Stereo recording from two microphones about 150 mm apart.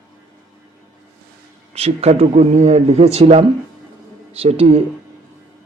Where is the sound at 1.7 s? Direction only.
40° right (ahead or behind).